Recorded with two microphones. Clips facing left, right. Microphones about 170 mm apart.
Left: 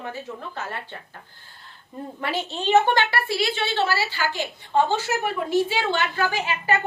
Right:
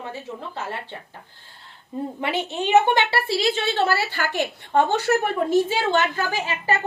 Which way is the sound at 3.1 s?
35° right (ahead or behind).